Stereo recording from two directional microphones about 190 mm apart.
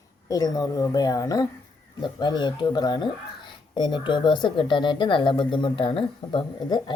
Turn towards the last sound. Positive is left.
turn(degrees=25)  # may be behind; listen again after turning